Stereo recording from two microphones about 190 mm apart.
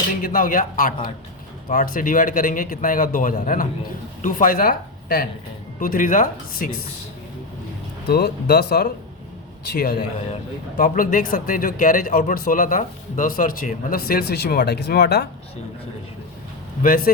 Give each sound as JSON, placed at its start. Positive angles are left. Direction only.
{"t": 0.1, "sound": "a man's voice", "side_deg": 50}
{"t": 8.0, "sound": "a man's voice", "side_deg": 55}
{"t": 16.8, "sound": "a man's voice", "side_deg": 50}